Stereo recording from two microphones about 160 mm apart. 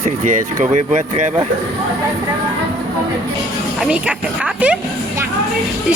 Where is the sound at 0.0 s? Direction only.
45° right (ahead or behind).